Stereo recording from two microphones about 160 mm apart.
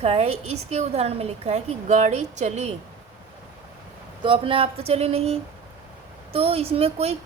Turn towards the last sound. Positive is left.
turn(degrees=-40)  # may be behind; listen again after turning